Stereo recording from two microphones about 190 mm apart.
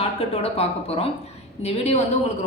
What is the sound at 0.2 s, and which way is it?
A woman's voice, 30° left (ahead or behind).